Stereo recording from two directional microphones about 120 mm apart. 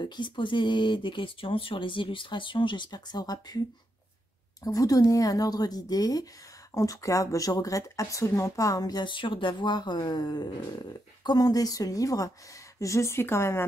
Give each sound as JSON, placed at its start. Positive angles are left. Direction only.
{"t": 0.0, "sound": "speech", "side_deg": 40}
{"t": 4.6, "sound": "a woman's voice", "side_deg": 30}